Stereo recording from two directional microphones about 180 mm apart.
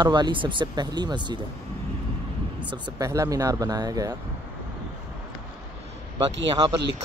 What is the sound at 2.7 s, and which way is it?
Speech, 20° right (ahead or behind).